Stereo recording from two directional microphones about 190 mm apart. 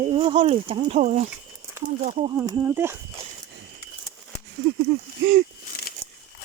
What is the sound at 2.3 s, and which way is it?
Speech, 20° right (ahead or behind).